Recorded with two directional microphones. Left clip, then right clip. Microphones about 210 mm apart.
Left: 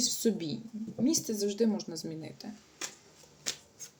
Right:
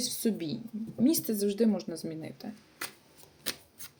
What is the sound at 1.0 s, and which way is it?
Speech, 25° right (ahead or behind).